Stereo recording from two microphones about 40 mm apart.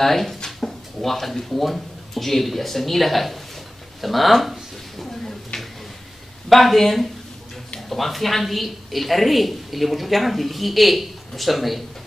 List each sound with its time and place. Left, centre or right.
0.0 s speech: centre
5.5 s a sound: centre
6.5 s speech: centre